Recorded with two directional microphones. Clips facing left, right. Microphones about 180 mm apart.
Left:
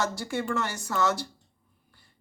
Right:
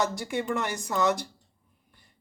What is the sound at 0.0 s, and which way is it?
Speech, 20° right (ahead or behind).